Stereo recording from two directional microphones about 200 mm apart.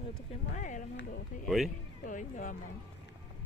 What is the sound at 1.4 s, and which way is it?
Speech, centre (ahead or behind).